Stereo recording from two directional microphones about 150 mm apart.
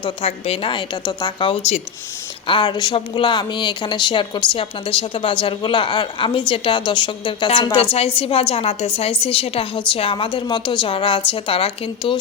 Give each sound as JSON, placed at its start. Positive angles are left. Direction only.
{"t": 0.0, "sound": "a woman's voice", "side_deg": 40}